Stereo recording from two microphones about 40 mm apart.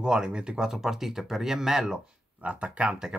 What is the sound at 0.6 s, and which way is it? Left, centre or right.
Speech, centre.